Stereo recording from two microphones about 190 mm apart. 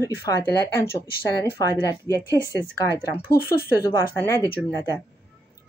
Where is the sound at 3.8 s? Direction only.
15° left (ahead or behind).